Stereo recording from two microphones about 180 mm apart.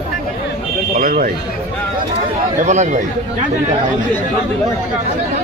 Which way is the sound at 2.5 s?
40° right (ahead or behind).